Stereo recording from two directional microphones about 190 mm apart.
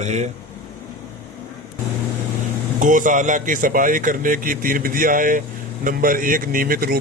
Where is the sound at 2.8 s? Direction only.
45° right (ahead or behind).